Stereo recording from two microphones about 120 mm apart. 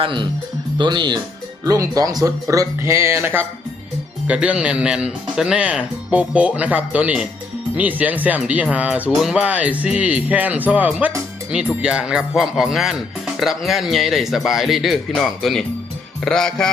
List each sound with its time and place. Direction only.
0.0 s speech: 45° right (ahead or behind); by 16.7 s 5° left (ahead or behind)